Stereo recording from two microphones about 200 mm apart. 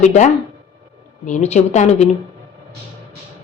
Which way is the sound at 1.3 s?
35° left (ahead or behind).